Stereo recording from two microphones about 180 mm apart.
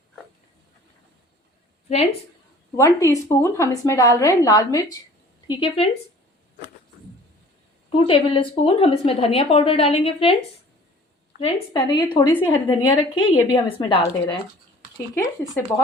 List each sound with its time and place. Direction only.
2.7 s a woman's voice: 15° left (ahead or behind)
7.9 s a woman's voice: 30° left (ahead or behind)
11.3 s a woman's voice: 35° left (ahead or behind)